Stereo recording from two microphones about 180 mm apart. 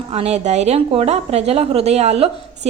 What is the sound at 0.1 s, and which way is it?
A woman's voice, 35° right (ahead or behind).